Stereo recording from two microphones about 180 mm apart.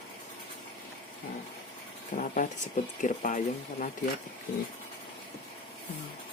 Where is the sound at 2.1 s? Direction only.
45° left (ahead or behind).